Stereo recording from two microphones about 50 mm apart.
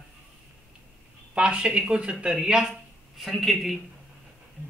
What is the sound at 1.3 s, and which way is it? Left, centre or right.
Speech, centre.